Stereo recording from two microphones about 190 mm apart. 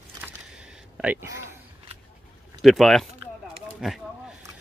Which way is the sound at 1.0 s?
10° right (ahead or behind).